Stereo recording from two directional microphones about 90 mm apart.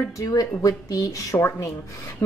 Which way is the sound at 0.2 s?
35° left (ahead or behind).